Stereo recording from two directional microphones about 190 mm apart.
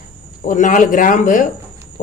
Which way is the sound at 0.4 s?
40° left (ahead or behind).